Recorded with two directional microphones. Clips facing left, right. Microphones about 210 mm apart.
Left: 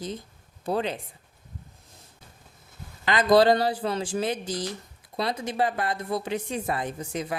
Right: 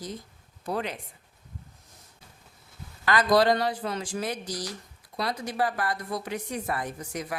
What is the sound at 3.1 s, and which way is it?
Speech, 25° left (ahead or behind).